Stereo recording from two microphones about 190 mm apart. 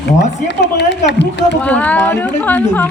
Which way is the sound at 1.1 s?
65° left (ahead or behind).